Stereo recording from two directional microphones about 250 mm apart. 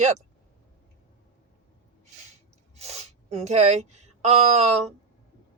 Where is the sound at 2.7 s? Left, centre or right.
Right.